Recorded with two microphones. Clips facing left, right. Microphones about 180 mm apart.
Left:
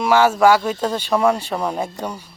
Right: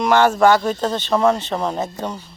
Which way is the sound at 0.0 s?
5° left (ahead or behind).